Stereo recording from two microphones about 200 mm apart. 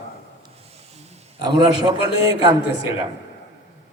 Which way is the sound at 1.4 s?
20° right (ahead or behind).